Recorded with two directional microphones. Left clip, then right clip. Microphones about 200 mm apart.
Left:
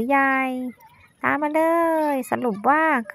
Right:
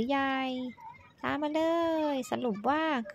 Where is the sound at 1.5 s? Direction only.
20° left (ahead or behind).